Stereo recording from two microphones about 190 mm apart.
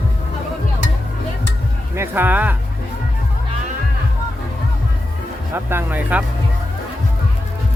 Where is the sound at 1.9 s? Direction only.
10° right (ahead or behind).